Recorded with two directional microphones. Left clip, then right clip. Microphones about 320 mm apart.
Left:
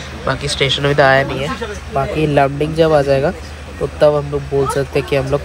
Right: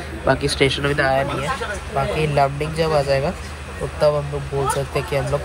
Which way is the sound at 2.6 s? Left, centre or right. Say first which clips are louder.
Left 8 dB; centre.